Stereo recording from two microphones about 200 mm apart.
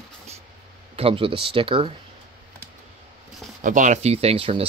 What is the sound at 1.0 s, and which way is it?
Speech, 25° right (ahead or behind).